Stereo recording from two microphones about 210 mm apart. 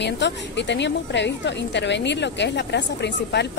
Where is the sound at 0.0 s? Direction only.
55° left (ahead or behind).